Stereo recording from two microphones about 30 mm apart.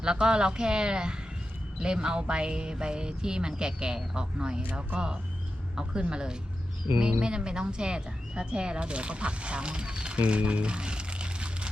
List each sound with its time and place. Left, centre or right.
0.0 s speech: right